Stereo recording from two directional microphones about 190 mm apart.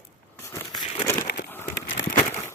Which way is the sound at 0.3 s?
15° left (ahead or behind).